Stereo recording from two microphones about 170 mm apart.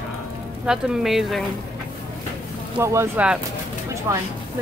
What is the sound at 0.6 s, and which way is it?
Speech, 5° right (ahead or behind).